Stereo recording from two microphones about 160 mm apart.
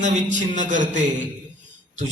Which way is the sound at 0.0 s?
50° right (ahead or behind).